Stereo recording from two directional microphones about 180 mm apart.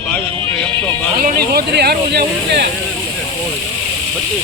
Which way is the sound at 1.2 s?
60° right (ahead or behind).